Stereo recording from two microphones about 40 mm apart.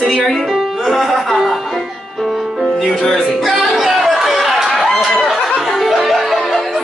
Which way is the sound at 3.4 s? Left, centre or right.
Centre.